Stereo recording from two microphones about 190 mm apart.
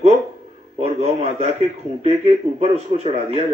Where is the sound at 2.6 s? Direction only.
35° right (ahead or behind).